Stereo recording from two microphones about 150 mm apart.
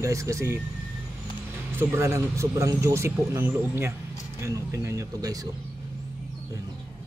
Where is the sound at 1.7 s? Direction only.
15° right (ahead or behind).